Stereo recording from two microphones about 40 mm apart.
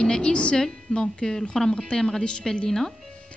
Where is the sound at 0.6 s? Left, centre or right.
Centre.